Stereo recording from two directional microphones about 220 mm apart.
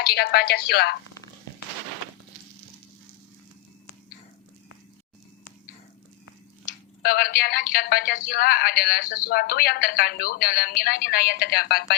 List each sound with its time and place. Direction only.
0.0 s a woman's voice: 45° left (ahead or behind)
6.7 s a woman's voice: 45° left (ahead or behind)